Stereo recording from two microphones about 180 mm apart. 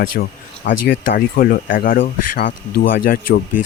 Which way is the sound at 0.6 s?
65° left (ahead or behind).